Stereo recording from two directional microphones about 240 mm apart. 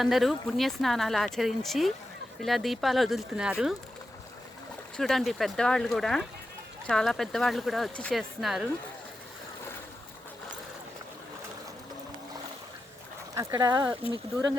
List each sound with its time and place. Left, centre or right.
0.0 s speech: centre
4.9 s speech: centre
13.3 s speech: centre